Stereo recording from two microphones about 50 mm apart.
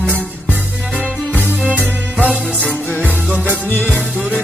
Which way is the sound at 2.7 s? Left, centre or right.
Left.